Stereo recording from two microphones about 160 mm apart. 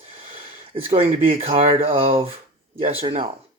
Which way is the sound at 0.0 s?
40° right (ahead or behind).